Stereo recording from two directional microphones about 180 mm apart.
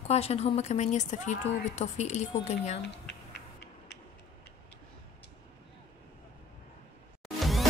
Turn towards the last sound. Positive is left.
turn(degrees=0)  # may be behind; listen again after turning